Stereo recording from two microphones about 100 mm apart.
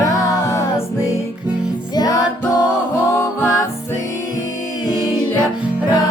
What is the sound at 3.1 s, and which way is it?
Music, 25° left (ahead or behind).